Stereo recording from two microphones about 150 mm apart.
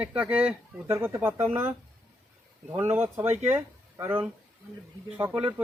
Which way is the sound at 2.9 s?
15° right (ahead or behind).